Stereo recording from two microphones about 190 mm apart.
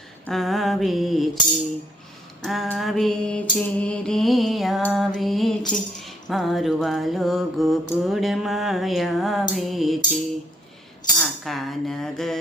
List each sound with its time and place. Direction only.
0.3 s mantra: centre (ahead or behind)
2.4 s mantra: centre (ahead or behind)
11.2 s speech: centre (ahead or behind)